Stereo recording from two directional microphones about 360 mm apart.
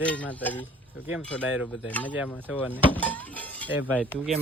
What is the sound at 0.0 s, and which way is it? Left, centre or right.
Speech, centre.